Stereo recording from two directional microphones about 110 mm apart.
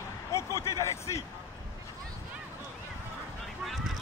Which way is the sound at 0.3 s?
25° left (ahead or behind).